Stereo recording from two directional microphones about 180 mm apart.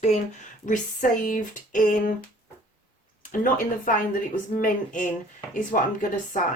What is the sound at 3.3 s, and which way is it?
Speech, 50° left (ahead or behind).